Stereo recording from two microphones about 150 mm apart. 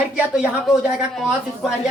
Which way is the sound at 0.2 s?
5° right (ahead or behind).